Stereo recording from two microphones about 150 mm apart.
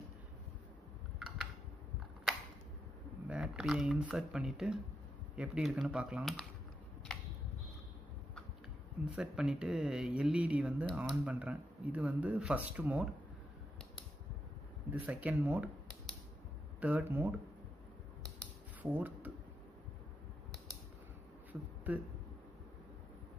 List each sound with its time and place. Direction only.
3.3 s speech: 5° right (ahead or behind)
9.0 s speech: 5° right (ahead or behind)
14.9 s speech: 10° right (ahead or behind)
16.8 s speech: 15° right (ahead or behind)
18.8 s speech: 10° right (ahead or behind)
21.5 s a sound: 10° right (ahead or behind)